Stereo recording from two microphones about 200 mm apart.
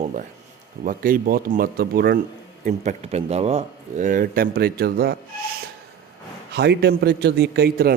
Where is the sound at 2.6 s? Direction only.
35° right (ahead or behind); by 5.1 s 50° right (ahead or behind).